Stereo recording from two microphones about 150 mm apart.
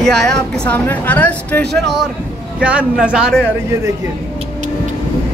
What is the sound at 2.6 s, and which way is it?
Speech, 10° right (ahead or behind).